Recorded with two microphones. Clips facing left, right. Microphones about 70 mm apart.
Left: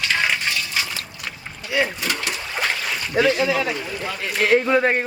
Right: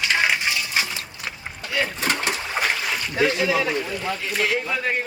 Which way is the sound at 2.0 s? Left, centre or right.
Right.